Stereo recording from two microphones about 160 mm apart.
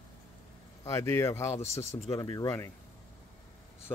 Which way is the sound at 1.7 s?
40° left (ahead or behind).